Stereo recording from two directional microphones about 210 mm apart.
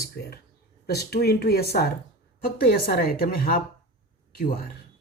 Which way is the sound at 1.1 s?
50° left (ahead or behind).